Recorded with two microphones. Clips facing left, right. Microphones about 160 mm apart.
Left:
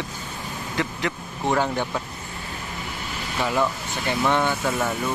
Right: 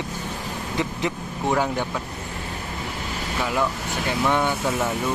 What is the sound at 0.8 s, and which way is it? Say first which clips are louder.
Vehicle: right 1 dB; 20° right (ahead or behind).